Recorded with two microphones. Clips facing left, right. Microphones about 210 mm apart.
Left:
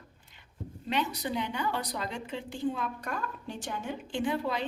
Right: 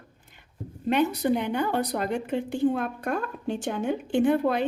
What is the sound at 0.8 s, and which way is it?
A woman's voice, 55° right (ahead or behind).